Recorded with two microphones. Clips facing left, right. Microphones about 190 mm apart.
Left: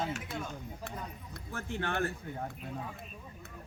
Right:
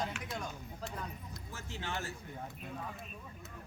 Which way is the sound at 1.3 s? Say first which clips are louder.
Left 7 dB; 55° left (ahead or behind).